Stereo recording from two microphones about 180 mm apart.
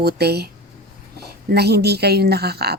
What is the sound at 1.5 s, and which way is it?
A woman's voice, 65° right (ahead or behind).